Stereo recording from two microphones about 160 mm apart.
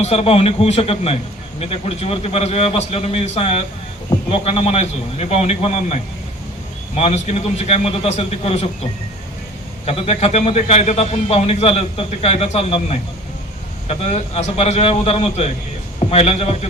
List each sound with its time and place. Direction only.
0.0 s a man's voice: 40° left (ahead or behind)